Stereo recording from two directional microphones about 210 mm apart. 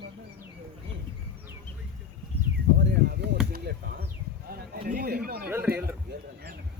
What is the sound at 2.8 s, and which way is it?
Chop, 50° right (ahead or behind).